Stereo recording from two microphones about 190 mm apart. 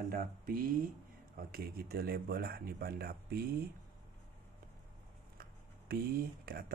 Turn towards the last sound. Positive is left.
turn(degrees=-50)  # may be behind; listen again after turning